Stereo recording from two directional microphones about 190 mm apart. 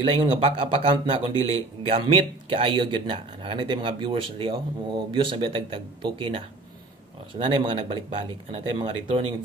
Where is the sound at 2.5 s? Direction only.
25° right (ahead or behind).